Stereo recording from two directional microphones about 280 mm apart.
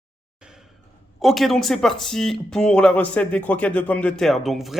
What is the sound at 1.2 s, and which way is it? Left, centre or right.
Speech, centre.